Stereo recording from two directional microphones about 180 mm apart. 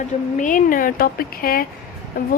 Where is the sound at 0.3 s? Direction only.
45° left (ahead or behind).